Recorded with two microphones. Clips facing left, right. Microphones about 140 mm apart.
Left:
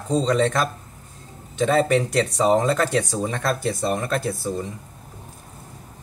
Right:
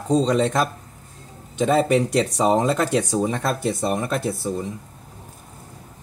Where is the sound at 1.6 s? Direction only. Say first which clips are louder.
Right 1 dB; 20° right (ahead or behind).